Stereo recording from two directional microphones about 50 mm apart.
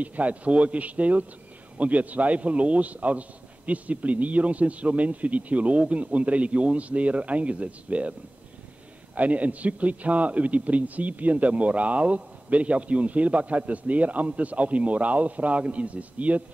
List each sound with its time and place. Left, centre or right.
0.0 s a man's voice: right
9.1 s a man's voice: right